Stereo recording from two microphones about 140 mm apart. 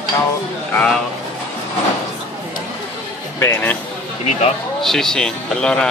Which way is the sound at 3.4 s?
15° left (ahead or behind).